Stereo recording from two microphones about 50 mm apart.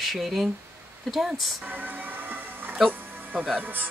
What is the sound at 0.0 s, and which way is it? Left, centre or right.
Speech, centre.